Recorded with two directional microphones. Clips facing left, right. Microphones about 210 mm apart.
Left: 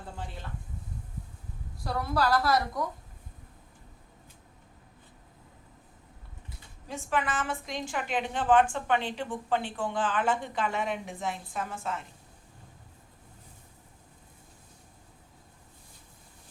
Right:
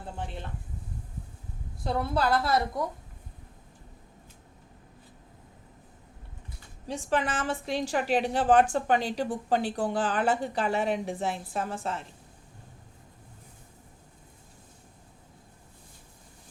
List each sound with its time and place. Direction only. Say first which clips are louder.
1.8 s a woman's voice: right 1 dB; 25° right (ahead or behind)
6.8 s a woman's voice: right 3 dB; 35° right (ahead or behind)